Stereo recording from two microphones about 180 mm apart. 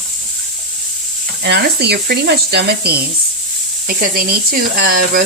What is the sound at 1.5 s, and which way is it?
Speech, 65° right (ahead or behind).